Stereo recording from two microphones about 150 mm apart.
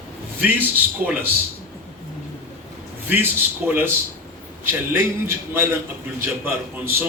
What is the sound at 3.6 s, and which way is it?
Speech, 10° right (ahead or behind).